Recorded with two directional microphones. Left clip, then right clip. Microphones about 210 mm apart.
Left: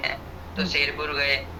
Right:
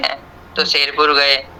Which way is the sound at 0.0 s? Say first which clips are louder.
Right 8 dB; 40° right (ahead or behind).